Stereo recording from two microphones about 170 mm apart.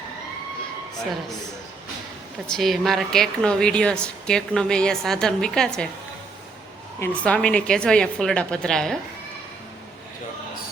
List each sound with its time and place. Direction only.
2.5 s a woman's voice: centre (ahead or behind)
7.0 s a woman's voice: 10° left (ahead or behind)